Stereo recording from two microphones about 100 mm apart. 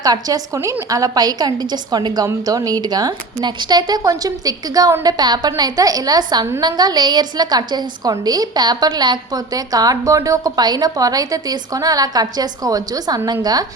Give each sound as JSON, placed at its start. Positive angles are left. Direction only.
{"t": 0.0, "sound": "a woman's voice", "side_deg": -40}